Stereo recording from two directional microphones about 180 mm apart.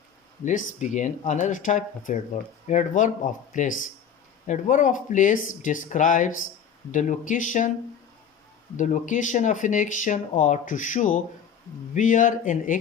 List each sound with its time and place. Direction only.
0.4 s speech: 45° left (ahead or behind)
8.7 s speech: 45° left (ahead or behind)